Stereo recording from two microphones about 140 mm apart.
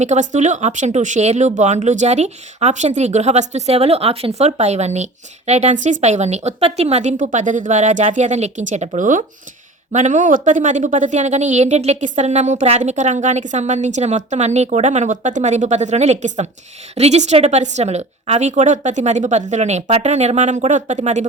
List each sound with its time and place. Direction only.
0.0 s a woman's voice: 55° right (ahead or behind)